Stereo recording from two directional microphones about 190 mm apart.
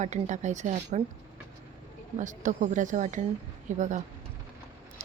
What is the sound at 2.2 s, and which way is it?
A woman's voice, 40° right (ahead or behind).